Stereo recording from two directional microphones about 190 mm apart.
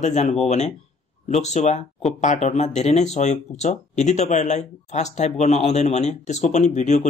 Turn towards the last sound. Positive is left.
turn(degrees=40)  # may be behind; listen again after turning